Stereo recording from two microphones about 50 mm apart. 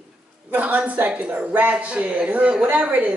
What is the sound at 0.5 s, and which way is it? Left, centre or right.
Speech, right.